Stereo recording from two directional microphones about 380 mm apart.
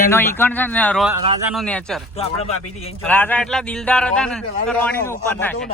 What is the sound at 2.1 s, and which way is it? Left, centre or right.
Speech, centre.